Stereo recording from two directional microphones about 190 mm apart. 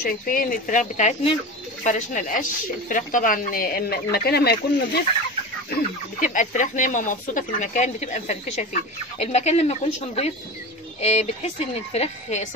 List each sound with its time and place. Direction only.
0.0 s speech: 50° left (ahead or behind)
5.7 s speech: 45° left (ahead or behind)